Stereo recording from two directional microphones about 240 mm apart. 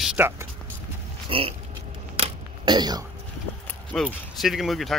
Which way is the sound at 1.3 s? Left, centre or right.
Right.